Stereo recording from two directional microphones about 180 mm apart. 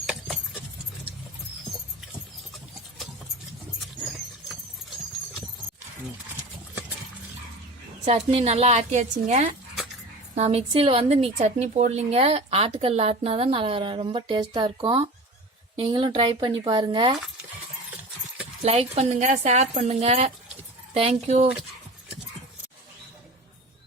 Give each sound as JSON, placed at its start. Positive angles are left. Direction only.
{"t": 0.0, "sound": "dog", "side_deg": 0}
{"t": 8.0, "sound": "a woman's voice", "side_deg": -35}
{"t": 18.6, "sound": "speech", "side_deg": -35}